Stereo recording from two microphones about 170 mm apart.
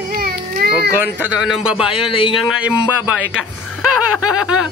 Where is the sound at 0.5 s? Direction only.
65° right (ahead or behind).